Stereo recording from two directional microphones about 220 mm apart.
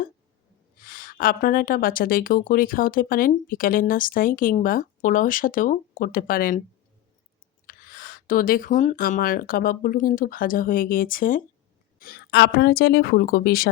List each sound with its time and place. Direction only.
0.8 s a woman's voice: 40° left (ahead or behind)
7.7 s a woman's voice: 40° left (ahead or behind)